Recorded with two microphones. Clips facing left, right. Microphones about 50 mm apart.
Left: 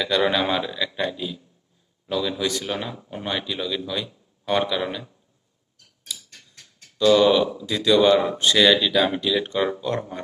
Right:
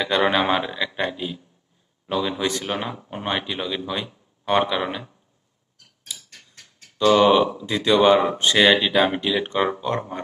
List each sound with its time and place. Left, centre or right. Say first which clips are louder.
0.0 s speech: right 1 dB; right
7.0 s speech: right 1 dB; right